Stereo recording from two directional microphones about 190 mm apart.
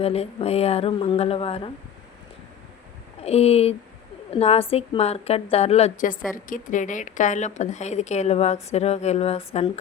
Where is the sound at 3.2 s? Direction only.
35° left (ahead or behind).